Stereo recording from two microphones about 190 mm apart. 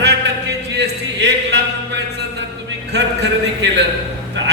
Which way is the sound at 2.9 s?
65° right (ahead or behind).